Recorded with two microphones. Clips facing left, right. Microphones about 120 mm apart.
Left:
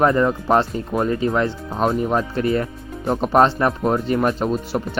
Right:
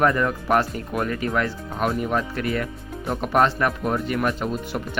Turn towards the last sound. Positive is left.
turn(degrees=35)  # may be behind; listen again after turning